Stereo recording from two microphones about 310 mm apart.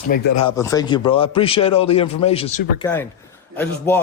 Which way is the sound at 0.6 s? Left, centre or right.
Centre.